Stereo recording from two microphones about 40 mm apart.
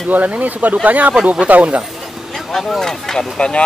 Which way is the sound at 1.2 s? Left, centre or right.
Right.